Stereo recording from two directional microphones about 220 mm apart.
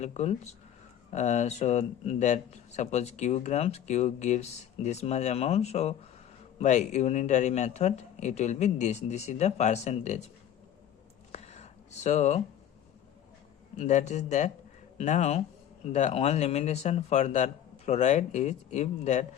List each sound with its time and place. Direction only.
0.0 s speech: 30° left (ahead or behind)
11.3 s a sound: 30° left (ahead or behind)
13.7 s speech: 30° left (ahead or behind)